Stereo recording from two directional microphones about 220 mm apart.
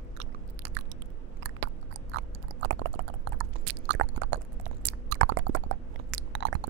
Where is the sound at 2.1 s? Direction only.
60° right (ahead or behind).